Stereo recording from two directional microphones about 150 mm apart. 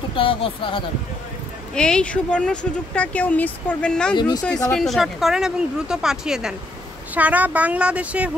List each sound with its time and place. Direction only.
0.1 s speech: 35° left (ahead or behind)
1.8 s speech: 5° left (ahead or behind)
4.1 s speech: 30° left (ahead or behind)
4.7 s a woman's voice: centre (ahead or behind)